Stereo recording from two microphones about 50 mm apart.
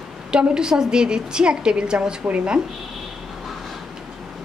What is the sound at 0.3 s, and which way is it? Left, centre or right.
A woman's voice, centre.